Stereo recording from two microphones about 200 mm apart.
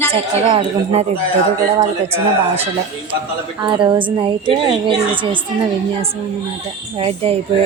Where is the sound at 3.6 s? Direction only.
25° right (ahead or behind).